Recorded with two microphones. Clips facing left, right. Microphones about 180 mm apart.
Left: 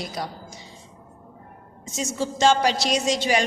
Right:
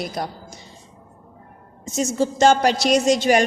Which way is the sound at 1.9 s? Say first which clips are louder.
Right 6 dB; 50° right (ahead or behind).